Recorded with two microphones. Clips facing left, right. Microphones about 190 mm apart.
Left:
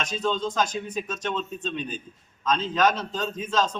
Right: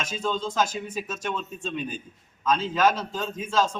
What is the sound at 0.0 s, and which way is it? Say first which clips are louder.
A man's voice: left 2 dB; 10° right (ahead or behind).